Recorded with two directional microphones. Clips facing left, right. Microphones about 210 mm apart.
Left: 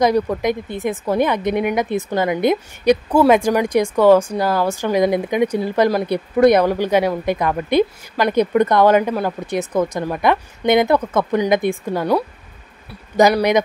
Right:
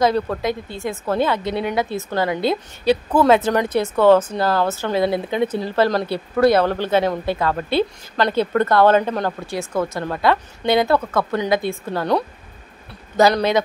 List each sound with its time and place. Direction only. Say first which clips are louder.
0.0 s a woman's voice: left 2 dB; 15° left (ahead or behind)